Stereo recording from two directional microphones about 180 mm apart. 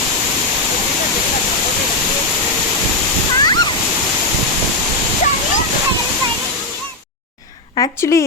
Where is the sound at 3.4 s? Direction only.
25° left (ahead or behind).